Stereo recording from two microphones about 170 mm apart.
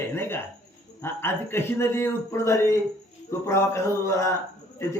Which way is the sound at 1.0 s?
15° left (ahead or behind).